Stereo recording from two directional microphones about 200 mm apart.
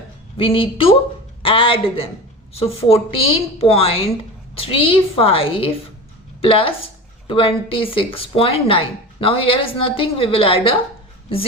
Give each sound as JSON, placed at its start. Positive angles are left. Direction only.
{"t": 0.3, "sound": "speech", "side_deg": 25}